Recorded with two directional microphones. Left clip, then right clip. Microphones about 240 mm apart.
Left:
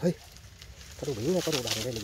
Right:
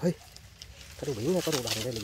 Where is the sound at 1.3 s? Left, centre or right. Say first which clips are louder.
Even; right.